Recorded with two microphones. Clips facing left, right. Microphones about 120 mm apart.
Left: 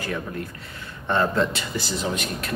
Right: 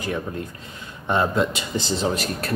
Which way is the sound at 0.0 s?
20° right (ahead or behind).